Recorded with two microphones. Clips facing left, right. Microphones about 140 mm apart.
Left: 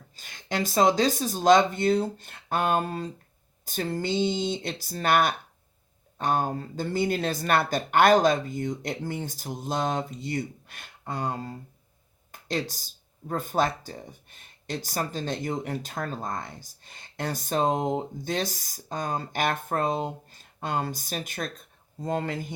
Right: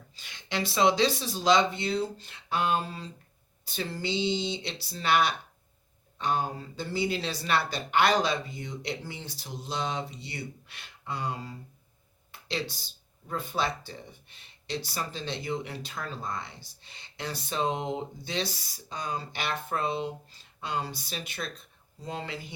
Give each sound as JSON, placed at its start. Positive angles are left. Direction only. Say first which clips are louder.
{"t": 0.2, "sound": "speech", "louder": "left 3 dB", "side_deg": 45}